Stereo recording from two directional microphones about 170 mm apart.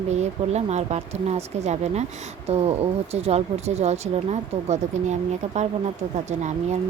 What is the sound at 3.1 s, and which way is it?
Speech, 40° right (ahead or behind).